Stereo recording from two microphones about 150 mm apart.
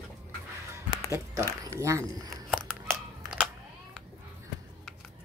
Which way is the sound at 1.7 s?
20° right (ahead or behind).